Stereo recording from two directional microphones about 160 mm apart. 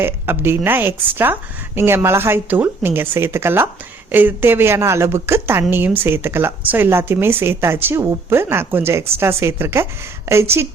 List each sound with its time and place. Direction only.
0.0 s speech: 15° right (ahead or behind)